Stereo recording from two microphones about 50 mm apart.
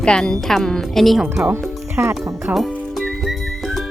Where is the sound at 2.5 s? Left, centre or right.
Centre.